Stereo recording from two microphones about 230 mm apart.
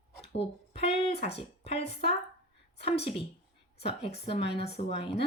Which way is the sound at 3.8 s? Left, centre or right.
Left.